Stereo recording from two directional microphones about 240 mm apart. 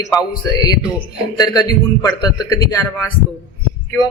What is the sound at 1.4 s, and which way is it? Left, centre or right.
A man's voice, centre.